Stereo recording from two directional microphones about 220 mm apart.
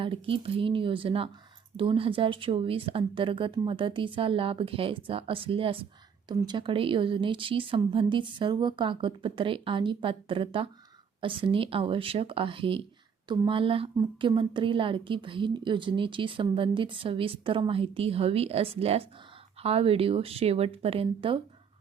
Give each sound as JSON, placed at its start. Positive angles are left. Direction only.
{"t": 0.0, "sound": "a woman's voice", "side_deg": -25}